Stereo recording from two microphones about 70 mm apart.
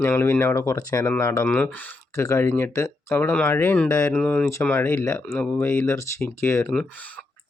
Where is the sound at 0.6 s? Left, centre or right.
Left.